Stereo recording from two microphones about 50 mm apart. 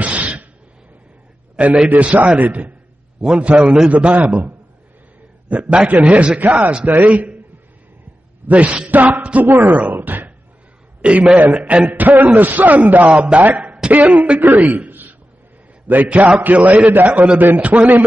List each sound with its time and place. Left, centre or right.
0.0 s a sound: right
1.9 s a man's voice: right
8.5 s speech: right
9.5 s speech: right
9.9 s a sound: right
11.0 s a man's voice: right
11.9 s a man's voice: right